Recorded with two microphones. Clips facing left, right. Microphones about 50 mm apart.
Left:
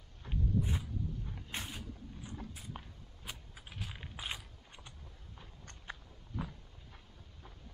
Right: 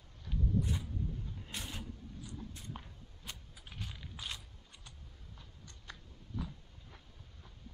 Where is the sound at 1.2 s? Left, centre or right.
Left.